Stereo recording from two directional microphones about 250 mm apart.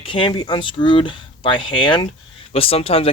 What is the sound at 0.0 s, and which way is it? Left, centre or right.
Speech, left.